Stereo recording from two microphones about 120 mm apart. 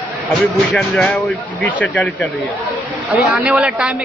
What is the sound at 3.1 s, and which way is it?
Speech, centre (ahead or behind).